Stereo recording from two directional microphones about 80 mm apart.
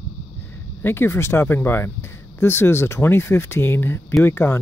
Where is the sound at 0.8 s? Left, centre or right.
Left.